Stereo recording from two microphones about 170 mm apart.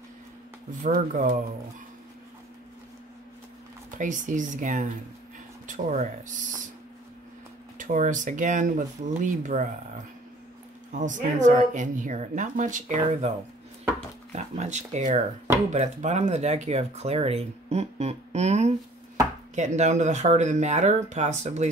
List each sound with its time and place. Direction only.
0.8 s speech: 45° right (ahead or behind)
4.0 s speech: 50° right (ahead or behind)
7.7 s speech: 50° right (ahead or behind)
10.9 s speech: 50° right (ahead or behind)